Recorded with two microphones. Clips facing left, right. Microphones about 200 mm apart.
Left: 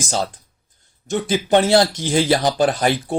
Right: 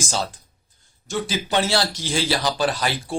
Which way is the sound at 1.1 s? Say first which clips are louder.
Left 6 dB; 55° left (ahead or behind).